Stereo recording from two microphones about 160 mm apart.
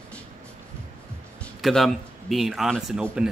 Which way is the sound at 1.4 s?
Centre (ahead or behind).